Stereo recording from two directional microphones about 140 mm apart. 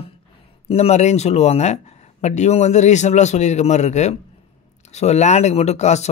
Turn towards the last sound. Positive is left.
turn(degrees=55)  # may be behind; listen again after turning